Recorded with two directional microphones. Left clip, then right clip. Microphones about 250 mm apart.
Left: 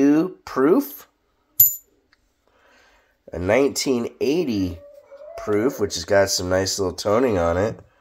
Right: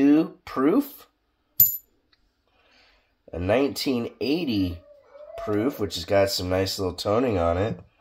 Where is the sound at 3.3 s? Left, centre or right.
Left.